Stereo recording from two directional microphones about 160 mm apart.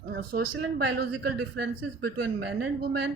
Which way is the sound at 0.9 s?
90° right.